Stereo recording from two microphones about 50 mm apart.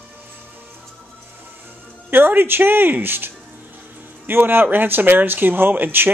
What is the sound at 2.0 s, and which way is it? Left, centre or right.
Speech, right.